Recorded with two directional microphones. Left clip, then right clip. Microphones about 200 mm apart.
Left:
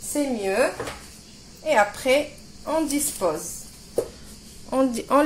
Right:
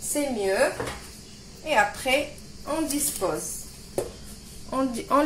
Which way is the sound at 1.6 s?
50° left (ahead or behind).